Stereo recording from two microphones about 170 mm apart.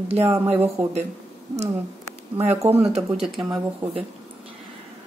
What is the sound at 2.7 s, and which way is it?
Speech, 10° right (ahead or behind).